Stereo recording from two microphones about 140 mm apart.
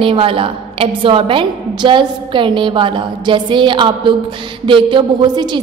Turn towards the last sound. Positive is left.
turn(degrees=-30)  # may be behind; listen again after turning